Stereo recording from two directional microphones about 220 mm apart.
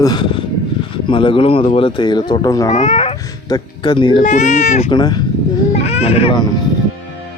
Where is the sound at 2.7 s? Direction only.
30° left (ahead or behind).